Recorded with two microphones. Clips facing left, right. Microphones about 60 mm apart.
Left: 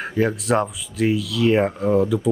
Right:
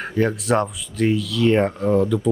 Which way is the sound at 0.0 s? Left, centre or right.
Centre.